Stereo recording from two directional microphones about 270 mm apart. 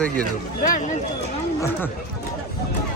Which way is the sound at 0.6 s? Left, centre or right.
Left.